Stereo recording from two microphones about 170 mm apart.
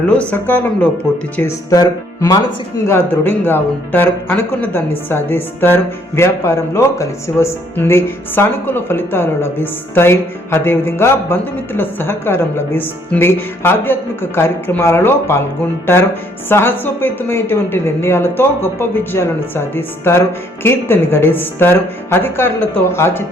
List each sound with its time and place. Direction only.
0.2 s speech: 10° left (ahead or behind)
16.5 s speech: 15° left (ahead or behind)